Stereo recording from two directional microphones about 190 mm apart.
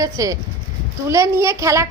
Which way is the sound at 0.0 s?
20° right (ahead or behind).